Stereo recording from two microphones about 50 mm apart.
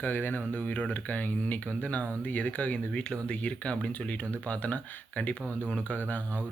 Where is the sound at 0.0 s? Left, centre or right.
Left.